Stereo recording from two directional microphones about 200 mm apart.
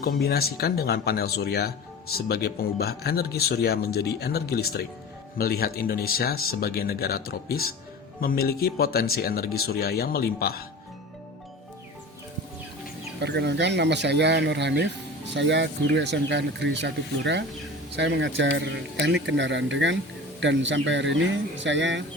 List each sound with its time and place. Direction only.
0.0 s speech: 50° left (ahead or behind)
13.1 s speech: 55° right (ahead or behind)